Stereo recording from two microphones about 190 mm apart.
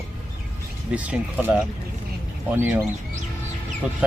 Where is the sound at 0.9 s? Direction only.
5° right (ahead or behind).